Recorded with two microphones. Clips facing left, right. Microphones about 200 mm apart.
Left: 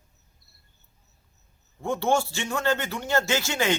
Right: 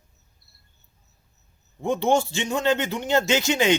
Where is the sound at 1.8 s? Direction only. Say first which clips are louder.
Right 3 dB; 20° right (ahead or behind).